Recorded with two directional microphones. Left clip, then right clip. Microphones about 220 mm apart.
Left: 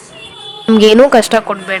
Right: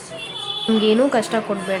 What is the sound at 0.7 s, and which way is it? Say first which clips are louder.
Speech: left 11 dB; 45° left (ahead or behind).